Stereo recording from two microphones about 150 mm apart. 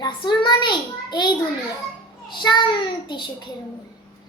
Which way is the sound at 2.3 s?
30° left (ahead or behind).